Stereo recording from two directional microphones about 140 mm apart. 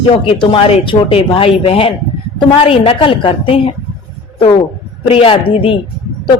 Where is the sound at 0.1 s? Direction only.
40° left (ahead or behind).